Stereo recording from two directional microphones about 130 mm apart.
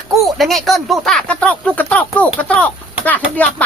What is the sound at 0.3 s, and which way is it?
Speech, centre (ahead or behind).